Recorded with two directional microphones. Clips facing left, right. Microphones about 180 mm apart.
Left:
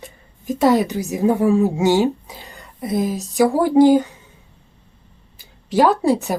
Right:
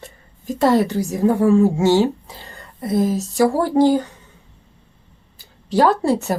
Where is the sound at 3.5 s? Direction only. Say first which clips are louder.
Left 5 dB; 15° left (ahead or behind).